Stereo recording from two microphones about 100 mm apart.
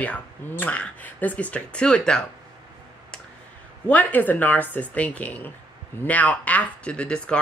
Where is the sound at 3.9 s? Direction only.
15° left (ahead or behind).